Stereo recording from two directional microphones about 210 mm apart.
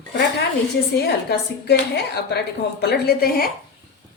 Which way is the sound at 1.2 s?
50° left (ahead or behind).